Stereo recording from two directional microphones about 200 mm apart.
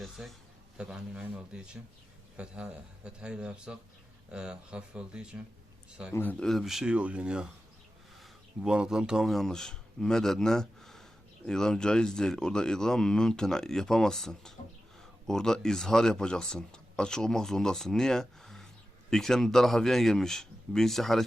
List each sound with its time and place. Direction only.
0.0 s speech: centre (ahead or behind)
6.1 s speech: 5° left (ahead or behind)